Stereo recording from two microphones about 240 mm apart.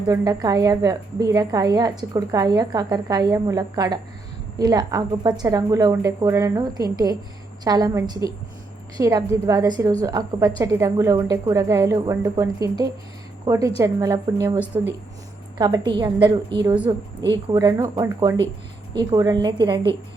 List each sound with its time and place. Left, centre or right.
0.1 s a woman's voice: centre